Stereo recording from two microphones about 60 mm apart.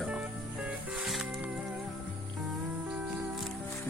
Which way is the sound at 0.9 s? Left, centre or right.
Centre.